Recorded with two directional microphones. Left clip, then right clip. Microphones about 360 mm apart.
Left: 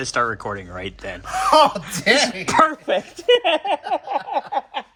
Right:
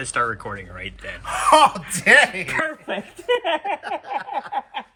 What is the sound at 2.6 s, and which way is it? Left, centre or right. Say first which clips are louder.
Speech: left 6 dB; centre.